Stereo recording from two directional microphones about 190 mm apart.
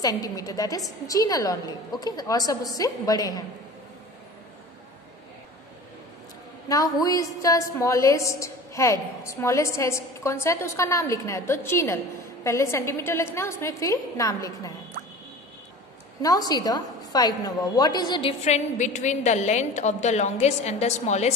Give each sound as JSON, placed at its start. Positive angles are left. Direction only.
{"t": 0.0, "sound": "a woman's voice", "side_deg": 20}
{"t": 6.7, "sound": "a woman's voice", "side_deg": 20}
{"t": 16.2, "sound": "a woman's voice", "side_deg": 20}
{"t": 18.4, "sound": "a woman's voice", "side_deg": 40}